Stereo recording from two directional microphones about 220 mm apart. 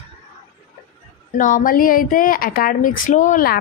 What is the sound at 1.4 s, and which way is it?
Speech, 40° left (ahead or behind).